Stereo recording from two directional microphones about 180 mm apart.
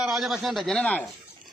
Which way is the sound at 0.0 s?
Centre (ahead or behind).